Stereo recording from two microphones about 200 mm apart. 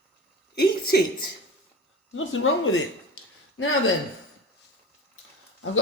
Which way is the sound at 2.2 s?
80° left.